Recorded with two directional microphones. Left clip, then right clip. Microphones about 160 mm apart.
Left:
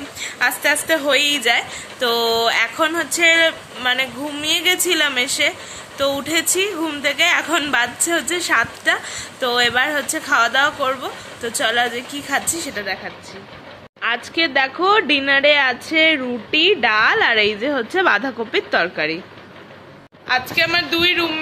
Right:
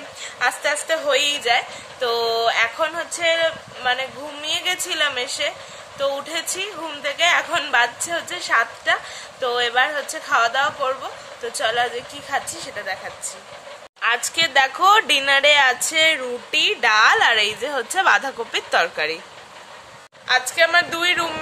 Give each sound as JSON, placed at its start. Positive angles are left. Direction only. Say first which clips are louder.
{"t": 0.2, "sound": "a woman's voice", "louder": "left 3 dB", "side_deg": -10}
{"t": 12.8, "sound": "a woman's voice", "louder": "left 2 dB", "side_deg": -10}
{"t": 20.2, "sound": "a woman's voice", "louder": "even", "side_deg": -25}
{"t": 20.7, "sound": "speech", "louder": "left 1 dB", "side_deg": -40}